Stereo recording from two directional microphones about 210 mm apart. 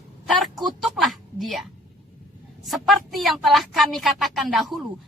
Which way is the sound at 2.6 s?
Centre (ahead or behind).